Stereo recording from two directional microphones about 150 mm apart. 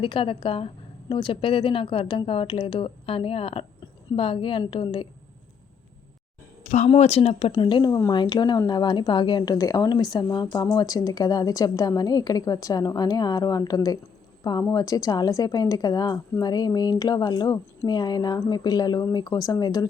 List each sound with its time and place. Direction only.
0.0 s speech: 35° left (ahead or behind)
6.7 s speech: 50° left (ahead or behind)
7.5 s speech: 30° left (ahead or behind)